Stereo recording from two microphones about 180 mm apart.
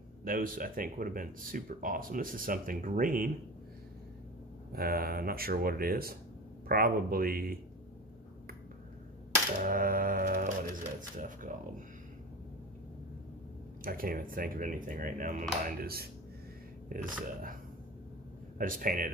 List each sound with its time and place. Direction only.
0.2 s speech: 50° right (ahead or behind)
4.7 s speech: 55° right (ahead or behind)
9.6 s speech: 50° right (ahead or behind)
13.8 s speech: 55° right (ahead or behind)
15.8 s speech: 55° right (ahead or behind)
18.6 s speech: 50° right (ahead or behind)